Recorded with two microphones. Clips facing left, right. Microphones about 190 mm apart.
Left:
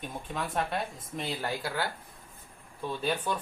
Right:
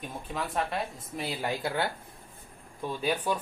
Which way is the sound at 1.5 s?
20° right (ahead or behind).